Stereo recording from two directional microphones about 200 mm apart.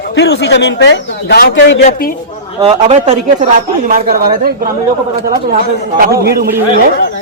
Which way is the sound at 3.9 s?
45° right (ahead or behind).